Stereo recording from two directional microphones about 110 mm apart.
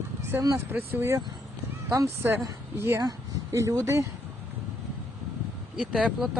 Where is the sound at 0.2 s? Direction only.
25° right (ahead or behind).